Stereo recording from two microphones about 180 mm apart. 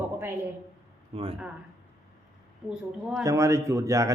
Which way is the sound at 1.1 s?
30° right (ahead or behind).